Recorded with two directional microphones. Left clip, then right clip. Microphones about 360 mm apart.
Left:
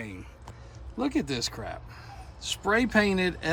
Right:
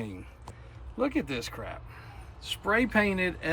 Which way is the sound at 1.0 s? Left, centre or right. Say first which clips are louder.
Left 1 dB; centre.